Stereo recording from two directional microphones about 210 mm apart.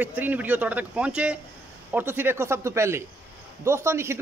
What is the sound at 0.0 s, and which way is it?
Speech, 10° right (ahead or behind).